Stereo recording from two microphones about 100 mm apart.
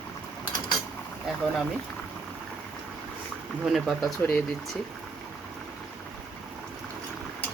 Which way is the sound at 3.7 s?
Centre (ahead or behind).